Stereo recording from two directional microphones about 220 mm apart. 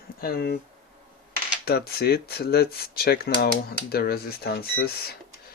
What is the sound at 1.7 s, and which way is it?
Speech, 45° left (ahead or behind).